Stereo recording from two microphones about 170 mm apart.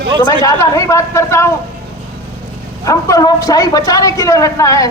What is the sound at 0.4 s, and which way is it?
A woman's voice, 15° left (ahead or behind).